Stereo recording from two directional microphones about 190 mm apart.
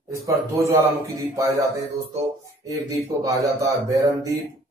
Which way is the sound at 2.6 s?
20° right (ahead or behind).